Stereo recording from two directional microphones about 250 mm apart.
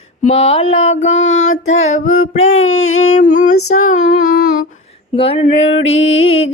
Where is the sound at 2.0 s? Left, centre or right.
Left.